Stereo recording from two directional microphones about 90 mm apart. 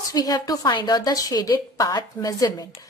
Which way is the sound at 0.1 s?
45° left (ahead or behind).